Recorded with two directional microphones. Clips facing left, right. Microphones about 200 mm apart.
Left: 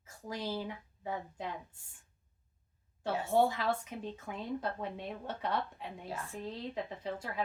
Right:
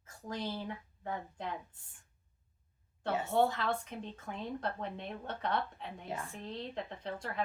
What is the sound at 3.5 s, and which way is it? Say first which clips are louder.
A woman's voice: left 1 dB; 10° left (ahead or behind).